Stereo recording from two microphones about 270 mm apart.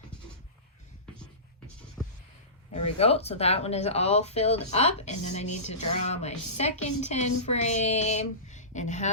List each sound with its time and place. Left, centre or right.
2.7 s speech: left